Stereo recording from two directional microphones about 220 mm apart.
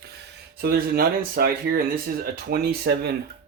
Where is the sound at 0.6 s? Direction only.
45° right (ahead or behind).